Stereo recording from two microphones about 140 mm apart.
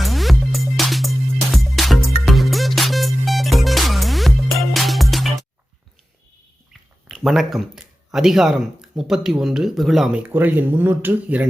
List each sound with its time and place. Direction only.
0.0 s music: centre (ahead or behind)
7.1 s speech: centre (ahead or behind)